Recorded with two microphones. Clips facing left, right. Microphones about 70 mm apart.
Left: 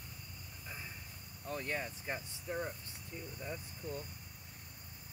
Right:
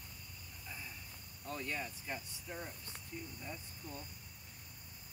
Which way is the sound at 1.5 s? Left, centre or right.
Left.